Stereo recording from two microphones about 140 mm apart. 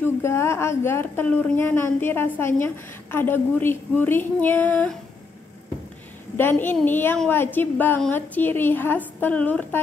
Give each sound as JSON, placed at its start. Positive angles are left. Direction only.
{"t": 0.0, "sound": "a woman's voice", "side_deg": 20}
{"t": 6.3, "sound": "a woman's voice", "side_deg": 15}